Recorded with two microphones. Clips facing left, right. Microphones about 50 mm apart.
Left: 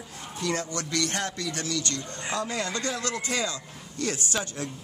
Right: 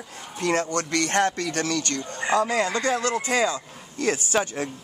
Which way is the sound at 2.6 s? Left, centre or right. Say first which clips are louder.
Right 7 dB; right.